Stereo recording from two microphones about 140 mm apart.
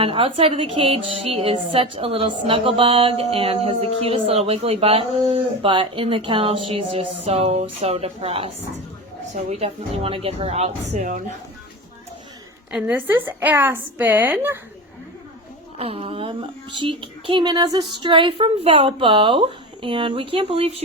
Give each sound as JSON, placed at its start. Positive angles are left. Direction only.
{"t": 0.0, "sound": "a woman's voice", "side_deg": -40}
{"t": 9.5, "sound": "speech", "side_deg": -45}
{"t": 12.7, "sound": "a woman's voice", "side_deg": -10}
{"t": 15.8, "sound": "a woman's voice", "side_deg": -45}